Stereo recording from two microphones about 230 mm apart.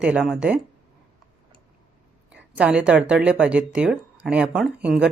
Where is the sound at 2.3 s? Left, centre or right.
Centre.